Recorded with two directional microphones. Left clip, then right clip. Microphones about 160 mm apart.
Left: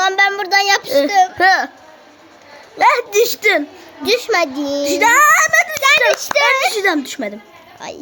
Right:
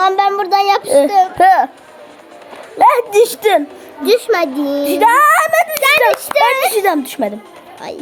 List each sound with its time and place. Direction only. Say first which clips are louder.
0.0 s child singing: right 2 dB; 20° left (ahead or behind)
1.0 s a child's voice: right 1 dB; 20° left (ahead or behind)
1.4 s a child's voice: right 4 dB; 25° right (ahead or behind)
2.7 s a child's voice: right 3 dB; 25° right (ahead or behind)
4.0 s a child's voice: right 3 dB; 15° left (ahead or behind)
4.9 s speech: right 1 dB; 30° right (ahead or behind)
5.7 s a sound: right 1 dB; 25° left (ahead or behind)
6.1 s a child's voice: right 2 dB; 25° left (ahead or behind)
6.7 s a child's voice: right 2 dB; 30° right (ahead or behind)
7.8 s a child's voice: right 3 dB; 20° left (ahead or behind)